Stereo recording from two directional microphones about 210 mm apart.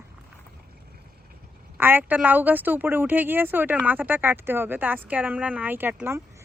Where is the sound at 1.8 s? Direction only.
10° right (ahead or behind).